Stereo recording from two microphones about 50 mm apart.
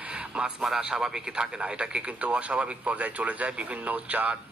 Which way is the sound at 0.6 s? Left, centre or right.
Centre.